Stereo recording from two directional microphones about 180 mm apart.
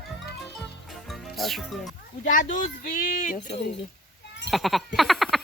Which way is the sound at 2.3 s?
50° left (ahead or behind).